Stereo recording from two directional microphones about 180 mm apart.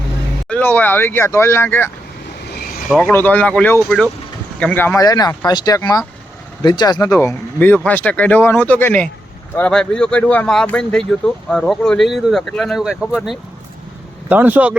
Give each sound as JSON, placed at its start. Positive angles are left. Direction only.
{"t": 0.5, "sound": "speech", "side_deg": 10}
{"t": 2.9, "sound": "speech", "side_deg": 10}